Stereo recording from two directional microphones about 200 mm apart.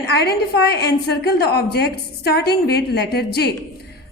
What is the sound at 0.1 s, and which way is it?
A woman's voice, 55° left (ahead or behind).